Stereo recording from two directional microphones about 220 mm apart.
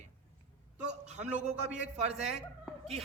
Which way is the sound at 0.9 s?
30° right (ahead or behind).